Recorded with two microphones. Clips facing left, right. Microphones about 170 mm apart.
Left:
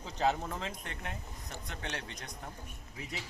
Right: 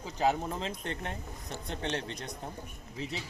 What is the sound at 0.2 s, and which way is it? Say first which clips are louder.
Speech: right 2 dB; 15° right (ahead or behind).